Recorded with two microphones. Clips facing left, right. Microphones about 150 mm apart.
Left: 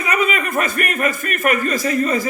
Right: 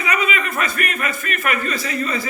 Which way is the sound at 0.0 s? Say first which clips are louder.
Left 2 dB; 45° left (ahead or behind).